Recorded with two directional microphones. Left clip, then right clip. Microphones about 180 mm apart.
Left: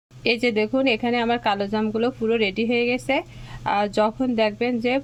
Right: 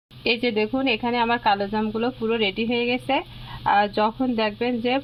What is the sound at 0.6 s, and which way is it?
Speech, 10° left (ahead or behind).